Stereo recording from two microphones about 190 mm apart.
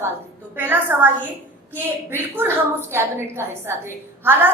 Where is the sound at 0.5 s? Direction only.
10° right (ahead or behind).